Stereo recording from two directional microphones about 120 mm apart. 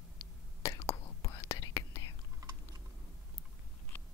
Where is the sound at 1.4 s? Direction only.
25° left (ahead or behind).